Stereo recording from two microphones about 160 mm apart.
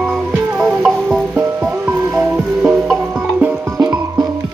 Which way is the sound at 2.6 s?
5° right (ahead or behind).